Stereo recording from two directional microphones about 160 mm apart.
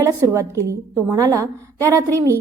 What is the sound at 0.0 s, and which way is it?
A woman's voice, 20° right (ahead or behind).